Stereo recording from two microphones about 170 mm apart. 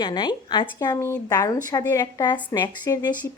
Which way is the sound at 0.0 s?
30° left (ahead or behind).